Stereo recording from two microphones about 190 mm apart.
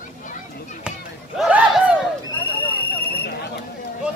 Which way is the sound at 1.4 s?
5° right (ahead or behind).